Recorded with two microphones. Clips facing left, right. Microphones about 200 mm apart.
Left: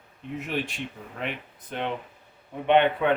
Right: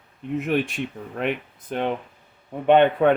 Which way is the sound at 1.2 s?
50° right (ahead or behind).